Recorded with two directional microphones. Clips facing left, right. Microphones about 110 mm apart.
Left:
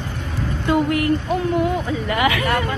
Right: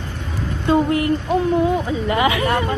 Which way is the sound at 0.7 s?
25° right (ahead or behind).